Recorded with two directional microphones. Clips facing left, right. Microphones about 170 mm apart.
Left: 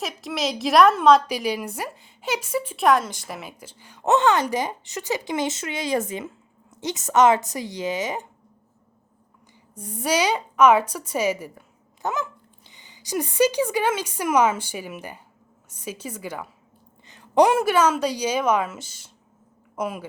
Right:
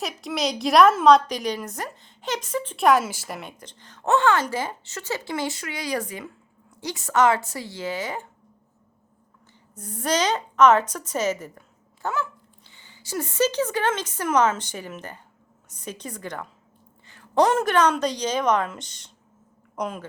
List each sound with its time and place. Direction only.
0.0 s a woman's voice: centre (ahead or behind); by 8.3 s 20° left (ahead or behind)
9.7 s a woman's voice: 10° left (ahead or behind)